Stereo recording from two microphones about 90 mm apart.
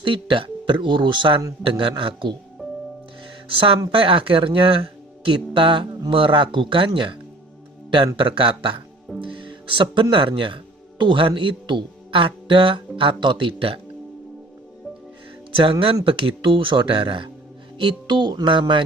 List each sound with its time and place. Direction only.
0.0 s a man's voice: 70° right (ahead or behind)
3.5 s a man's voice: 75° right (ahead or behind)
3.9 s a man's voice: 85° right
15.5 s a man's voice: 85° right; by 18.6 s 55° right (ahead or behind)